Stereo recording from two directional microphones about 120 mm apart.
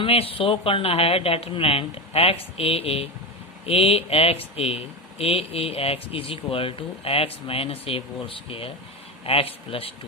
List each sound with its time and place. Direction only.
0.0 s speech: 50° left (ahead or behind)